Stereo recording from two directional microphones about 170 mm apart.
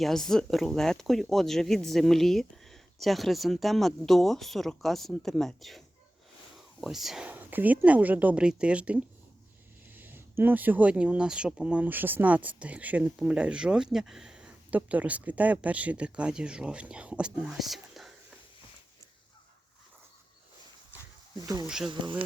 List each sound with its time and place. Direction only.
0.0 s speech: centre (ahead or behind)
6.8 s speech: centre (ahead or behind)
21.4 s speech: 20° right (ahead or behind)